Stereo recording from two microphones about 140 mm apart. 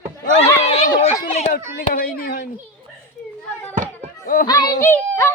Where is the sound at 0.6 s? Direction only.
45° left (ahead or behind).